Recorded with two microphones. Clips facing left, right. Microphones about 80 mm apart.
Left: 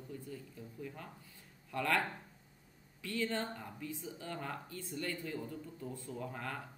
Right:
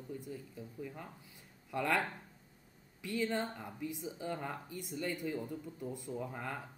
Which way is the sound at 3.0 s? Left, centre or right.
Centre.